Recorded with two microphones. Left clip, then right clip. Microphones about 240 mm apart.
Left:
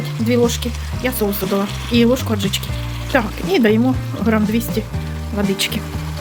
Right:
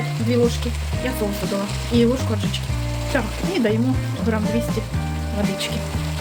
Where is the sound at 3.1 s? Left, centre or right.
Left.